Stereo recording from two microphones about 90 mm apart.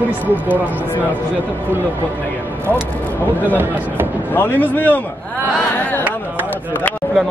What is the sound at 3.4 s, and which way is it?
Speech, 20° right (ahead or behind).